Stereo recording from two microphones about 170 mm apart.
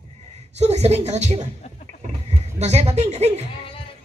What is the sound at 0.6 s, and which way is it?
Speech, 40° right (ahead or behind).